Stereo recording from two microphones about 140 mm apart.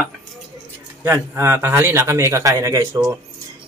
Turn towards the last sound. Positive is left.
turn(degrees=-20)  # may be behind; listen again after turning